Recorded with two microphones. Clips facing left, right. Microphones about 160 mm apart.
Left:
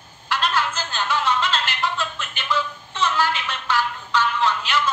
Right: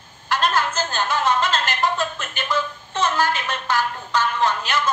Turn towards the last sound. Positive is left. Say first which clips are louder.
# right 1 dB
turn(degrees=-45)  # may be behind; listen again after turning